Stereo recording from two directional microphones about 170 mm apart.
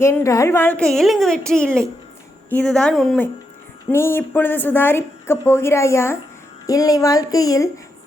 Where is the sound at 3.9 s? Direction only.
15° left (ahead or behind).